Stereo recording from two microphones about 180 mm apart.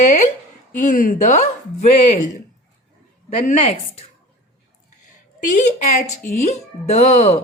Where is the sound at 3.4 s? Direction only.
35° left (ahead or behind).